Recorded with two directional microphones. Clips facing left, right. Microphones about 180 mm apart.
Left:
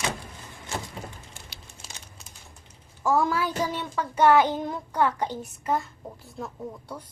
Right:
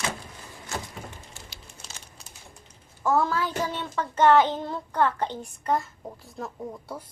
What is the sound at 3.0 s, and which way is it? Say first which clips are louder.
A child's voice: even; 10° left (ahead or behind).